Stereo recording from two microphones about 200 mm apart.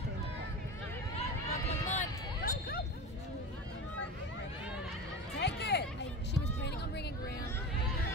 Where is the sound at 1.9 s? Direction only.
45° left (ahead or behind).